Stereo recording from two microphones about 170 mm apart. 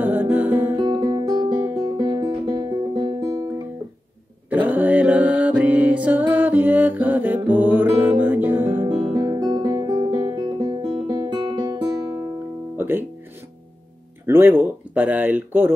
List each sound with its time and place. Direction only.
0.0 s music: 10° right (ahead or behind)
0.7 s music: 25° right (ahead or behind); by 8.8 s 10° right (ahead or behind)
8.8 s guitar: 25° right (ahead or behind)
12.7 s music: 10° right (ahead or behind)
14.2 s a sound: 10° right (ahead or behind)